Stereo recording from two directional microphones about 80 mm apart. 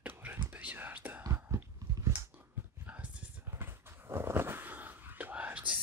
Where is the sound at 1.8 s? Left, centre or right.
Right.